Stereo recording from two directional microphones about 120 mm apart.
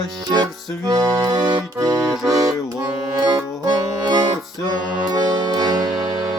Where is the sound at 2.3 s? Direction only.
30° right (ahead or behind).